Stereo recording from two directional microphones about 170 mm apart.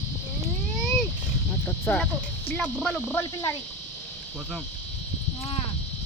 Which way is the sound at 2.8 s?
5° left (ahead or behind).